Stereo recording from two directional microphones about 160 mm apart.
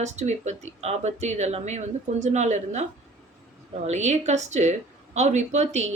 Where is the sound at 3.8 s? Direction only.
45° right (ahead or behind).